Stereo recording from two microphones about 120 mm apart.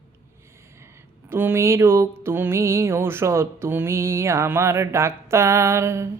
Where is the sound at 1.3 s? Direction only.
20° right (ahead or behind).